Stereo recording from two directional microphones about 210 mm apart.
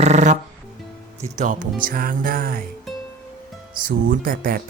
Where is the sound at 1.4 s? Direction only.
40° right (ahead or behind).